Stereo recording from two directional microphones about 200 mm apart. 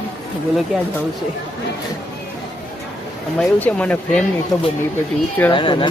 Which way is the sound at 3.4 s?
5° left (ahead or behind).